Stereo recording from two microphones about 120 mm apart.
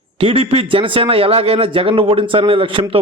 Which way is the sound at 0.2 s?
50° right (ahead or behind).